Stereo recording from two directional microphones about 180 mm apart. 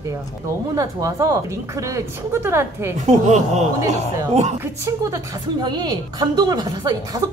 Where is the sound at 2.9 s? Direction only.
40° right (ahead or behind).